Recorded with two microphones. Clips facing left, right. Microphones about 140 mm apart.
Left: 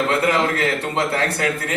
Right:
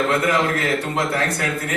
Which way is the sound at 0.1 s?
30° left (ahead or behind).